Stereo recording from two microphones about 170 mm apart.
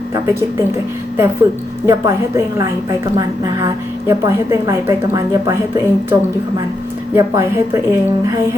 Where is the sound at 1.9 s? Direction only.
20° right (ahead or behind).